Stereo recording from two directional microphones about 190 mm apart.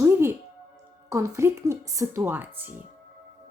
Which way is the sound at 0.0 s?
10° right (ahead or behind).